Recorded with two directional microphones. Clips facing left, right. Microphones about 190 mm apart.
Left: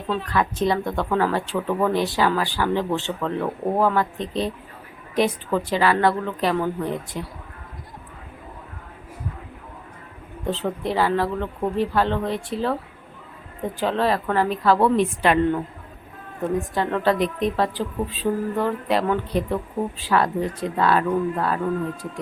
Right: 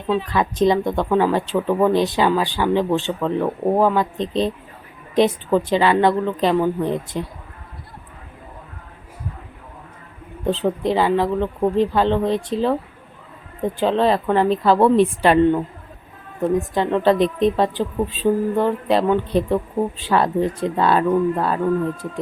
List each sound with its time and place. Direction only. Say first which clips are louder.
0.3 s speech: right 3 dB; 20° right (ahead or behind)
10.5 s speech: right 5 dB; 15° right (ahead or behind)
13.7 s speech: right 4 dB; 25° right (ahead or behind)
16.6 s speech: right 4 dB; 20° right (ahead or behind)